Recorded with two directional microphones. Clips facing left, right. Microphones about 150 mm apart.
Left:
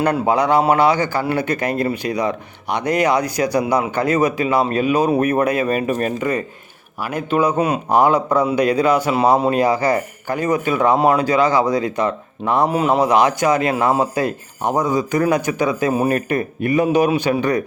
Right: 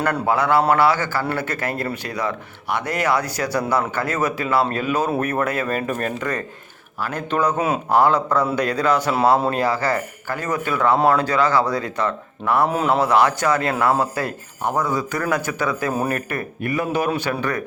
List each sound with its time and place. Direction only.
0.0 s a man's voice: 20° left (ahead or behind)
12.6 s speech: centre (ahead or behind)
12.9 s a man's voice: 15° left (ahead or behind)